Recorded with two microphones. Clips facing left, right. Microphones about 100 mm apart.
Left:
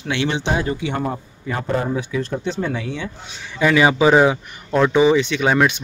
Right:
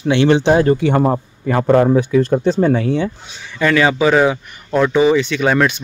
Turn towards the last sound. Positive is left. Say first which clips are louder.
# right 2 dB
turn(degrees=10)  # may be behind; listen again after turning